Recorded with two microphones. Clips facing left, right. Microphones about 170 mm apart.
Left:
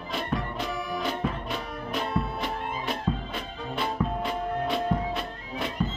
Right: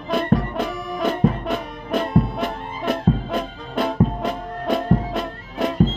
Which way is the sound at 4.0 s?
45° right (ahead or behind).